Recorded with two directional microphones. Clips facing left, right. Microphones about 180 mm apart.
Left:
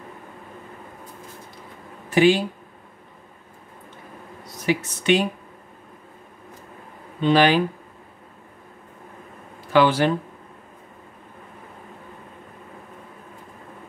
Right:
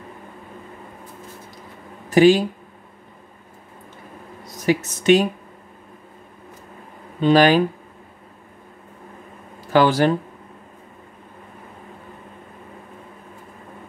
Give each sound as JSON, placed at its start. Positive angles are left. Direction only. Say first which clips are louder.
{"t": 2.0, "sound": "speech", "louder": "right 4 dB", "side_deg": -40}
{"t": 4.6, "sound": "speech", "louder": "right 4 dB", "side_deg": -40}
{"t": 7.2, "sound": "speech", "louder": "right 3 dB", "side_deg": -40}
{"t": 9.7, "sound": "speech", "louder": "right 2 dB", "side_deg": -40}